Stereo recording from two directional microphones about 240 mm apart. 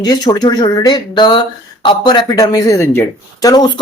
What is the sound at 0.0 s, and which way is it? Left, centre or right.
Speech, centre.